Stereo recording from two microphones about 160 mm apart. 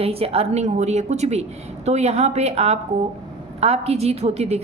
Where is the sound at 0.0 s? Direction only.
40° right (ahead or behind).